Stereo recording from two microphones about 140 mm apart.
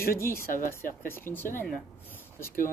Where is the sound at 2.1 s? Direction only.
15° left (ahead or behind).